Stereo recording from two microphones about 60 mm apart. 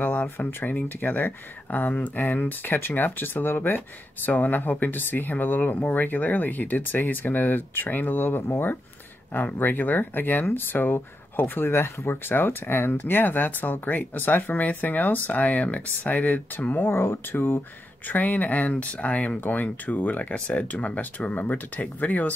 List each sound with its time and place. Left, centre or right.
0.0 s speech: left
16.9 s speech: left